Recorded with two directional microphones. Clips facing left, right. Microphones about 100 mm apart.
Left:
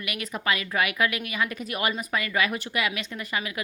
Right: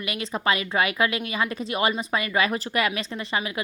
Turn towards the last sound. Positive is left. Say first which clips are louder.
# right 3 dB
turn(degrees=-30)  # may be behind; listen again after turning